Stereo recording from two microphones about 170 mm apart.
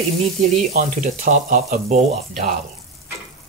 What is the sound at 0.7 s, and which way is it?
Speech, 50° right (ahead or behind).